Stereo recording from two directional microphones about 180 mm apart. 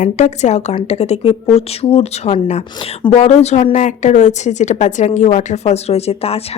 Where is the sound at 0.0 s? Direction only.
40° left (ahead or behind).